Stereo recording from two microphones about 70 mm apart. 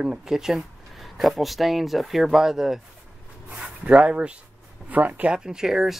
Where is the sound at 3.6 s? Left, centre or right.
Centre.